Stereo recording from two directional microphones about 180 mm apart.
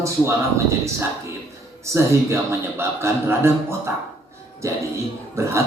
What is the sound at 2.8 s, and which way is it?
A man's voice, 15° right (ahead or behind).